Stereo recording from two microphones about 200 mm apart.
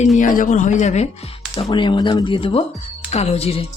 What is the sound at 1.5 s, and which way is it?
Speech, 25° left (ahead or behind).